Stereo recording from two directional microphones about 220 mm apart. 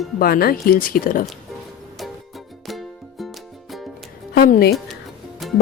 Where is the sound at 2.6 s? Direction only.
Centre (ahead or behind).